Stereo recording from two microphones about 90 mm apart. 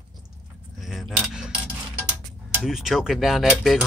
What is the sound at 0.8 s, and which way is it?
Keys jangling, centre (ahead or behind).